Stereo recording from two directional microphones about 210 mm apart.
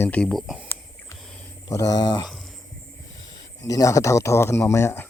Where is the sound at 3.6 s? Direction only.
15° left (ahead or behind).